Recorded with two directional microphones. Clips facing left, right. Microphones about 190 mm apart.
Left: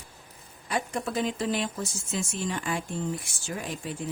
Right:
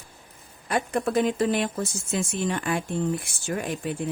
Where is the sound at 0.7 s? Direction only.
60° right (ahead or behind).